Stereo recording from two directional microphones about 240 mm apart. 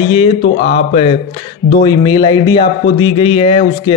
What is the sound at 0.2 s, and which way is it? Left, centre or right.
Speech, left.